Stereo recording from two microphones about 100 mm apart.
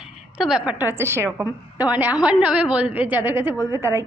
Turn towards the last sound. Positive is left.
turn(degrees=-30)  # may be behind; listen again after turning